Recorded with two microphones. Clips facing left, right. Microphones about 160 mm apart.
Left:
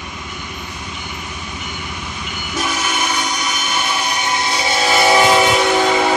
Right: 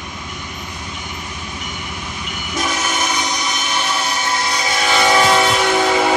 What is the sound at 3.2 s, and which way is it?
Train, 10° left (ahead or behind).